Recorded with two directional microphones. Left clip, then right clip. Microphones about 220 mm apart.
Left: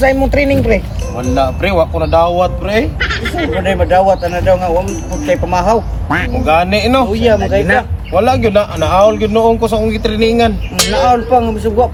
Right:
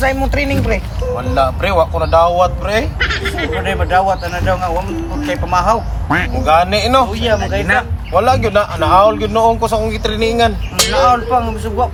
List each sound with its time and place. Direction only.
0.0 s speech: centre (ahead or behind)
1.1 s a man's voice: 15° right (ahead or behind)
3.0 s speech: centre (ahead or behind)
6.4 s a man's voice: 15° right (ahead or behind)
7.1 s speech: centre (ahead or behind)
8.1 s a man's voice: 15° right (ahead or behind)
10.8 s speech: centre (ahead or behind)